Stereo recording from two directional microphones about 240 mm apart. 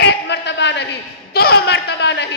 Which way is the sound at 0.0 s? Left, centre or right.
Left.